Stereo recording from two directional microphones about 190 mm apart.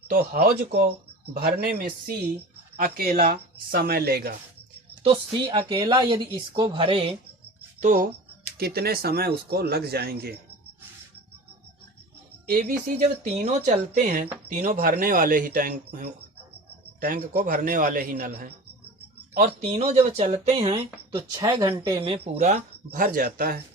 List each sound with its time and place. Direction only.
0.1 s speech: 50° right (ahead or behind)
5.0 s speech: 30° right (ahead or behind)
7.8 s speech: 45° right (ahead or behind)
8.5 s speech: 55° right (ahead or behind)
13.0 s speech: 40° right (ahead or behind); by 18.5 s 55° right (ahead or behind)
19.6 s speech: 35° right (ahead or behind)
22.0 s speech: 30° right (ahead or behind); by 23.6 s 50° right (ahead or behind)